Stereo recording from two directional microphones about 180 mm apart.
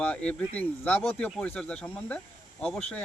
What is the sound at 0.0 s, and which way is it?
Speech, 5° left (ahead or behind).